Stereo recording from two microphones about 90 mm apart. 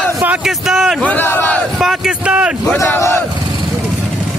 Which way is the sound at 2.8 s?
35° left (ahead or behind).